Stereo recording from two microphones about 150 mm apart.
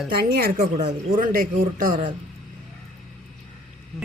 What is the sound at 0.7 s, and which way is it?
Speech, 45° right (ahead or behind).